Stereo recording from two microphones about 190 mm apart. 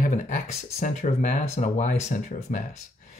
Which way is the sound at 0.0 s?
40° left (ahead or behind).